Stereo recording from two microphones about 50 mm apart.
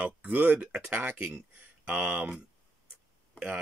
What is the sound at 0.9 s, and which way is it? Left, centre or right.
Speech, right.